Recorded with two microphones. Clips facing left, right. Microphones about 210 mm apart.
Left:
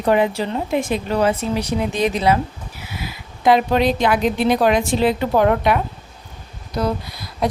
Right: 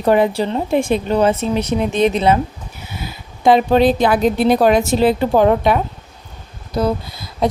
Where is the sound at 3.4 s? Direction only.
30° right (ahead or behind).